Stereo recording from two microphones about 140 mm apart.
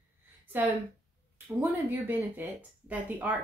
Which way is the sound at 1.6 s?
15° right (ahead or behind).